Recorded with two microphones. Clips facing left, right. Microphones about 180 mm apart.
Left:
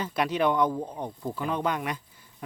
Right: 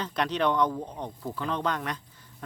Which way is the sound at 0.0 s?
10° left (ahead or behind).